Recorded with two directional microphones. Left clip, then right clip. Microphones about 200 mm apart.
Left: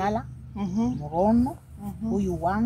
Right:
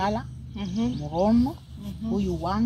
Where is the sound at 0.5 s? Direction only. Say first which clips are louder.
Left 1 dB; 65° left (ahead or behind).